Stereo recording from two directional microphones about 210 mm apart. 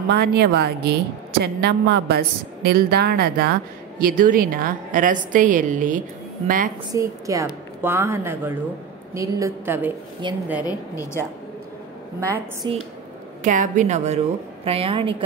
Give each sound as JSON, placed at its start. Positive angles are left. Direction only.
{"t": 0.1, "sound": "a woman's voice", "side_deg": -50}
{"t": 6.9, "sound": "a woman's voice", "side_deg": -15}
{"t": 10.2, "sound": "a woman's voice", "side_deg": -20}
{"t": 10.6, "sound": "a woman's voice", "side_deg": 15}
{"t": 12.2, "sound": "a woman's voice", "side_deg": -15}
{"t": 13.4, "sound": "a woman's voice", "side_deg": -35}